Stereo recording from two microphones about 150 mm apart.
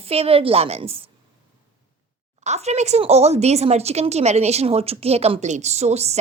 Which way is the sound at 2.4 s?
50° right (ahead or behind).